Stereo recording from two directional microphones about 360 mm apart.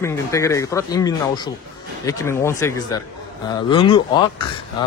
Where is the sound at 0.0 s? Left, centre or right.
Centre.